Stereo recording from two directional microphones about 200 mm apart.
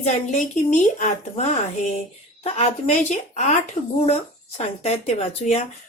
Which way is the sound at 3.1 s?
35° left (ahead or behind).